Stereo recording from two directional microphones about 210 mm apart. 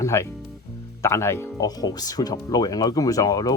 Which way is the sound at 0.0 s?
15° left (ahead or behind).